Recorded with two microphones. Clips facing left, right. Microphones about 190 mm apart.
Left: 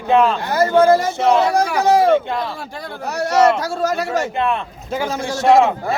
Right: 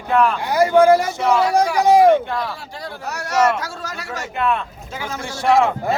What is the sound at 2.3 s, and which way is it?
Speech, 20° left (ahead or behind).